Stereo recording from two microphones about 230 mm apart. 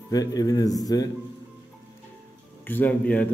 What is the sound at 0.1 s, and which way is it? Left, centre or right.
A man's voice, centre.